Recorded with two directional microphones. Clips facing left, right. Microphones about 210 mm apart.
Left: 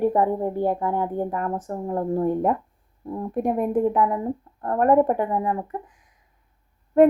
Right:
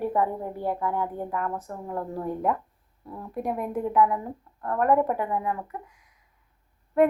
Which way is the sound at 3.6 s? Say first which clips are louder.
Left 1 dB; 30° left (ahead or behind).